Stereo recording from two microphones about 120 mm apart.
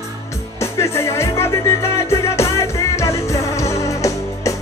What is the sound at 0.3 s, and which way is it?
Music, 20° left (ahead or behind).